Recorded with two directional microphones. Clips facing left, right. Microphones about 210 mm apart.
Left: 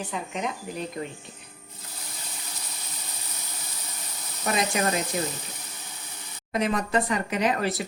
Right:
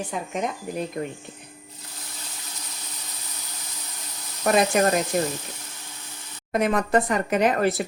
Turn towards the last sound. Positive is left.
turn(degrees=-50)  # may be behind; listen again after turning